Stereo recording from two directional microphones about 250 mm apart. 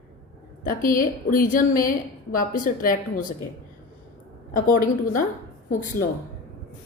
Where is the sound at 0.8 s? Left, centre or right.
Left.